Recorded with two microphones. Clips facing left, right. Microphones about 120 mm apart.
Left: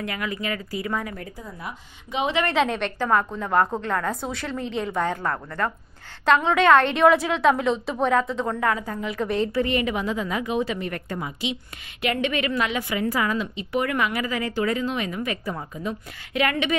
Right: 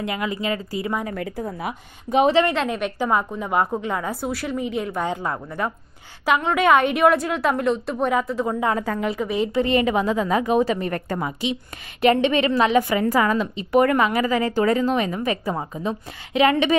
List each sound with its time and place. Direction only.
0.0 s speech: 25° right (ahead or behind)
1.1 s a woman's voice: 80° right
2.0 s a woman's voice: 45° right (ahead or behind)
2.5 s a woman's voice: centre (ahead or behind)
5.0 s a woman's voice: 15° right (ahead or behind)
8.8 s a woman's voice: 70° right (ahead or behind)
9.2 s a woman's voice: 5° right (ahead or behind)
9.5 s a woman's voice: 25° right (ahead or behind); by 11.5 s 45° right (ahead or behind)
12.0 s a woman's voice: 30° right (ahead or behind)
12.7 s a woman's voice: 45° right (ahead or behind); by 16.7 s 30° right (ahead or behind)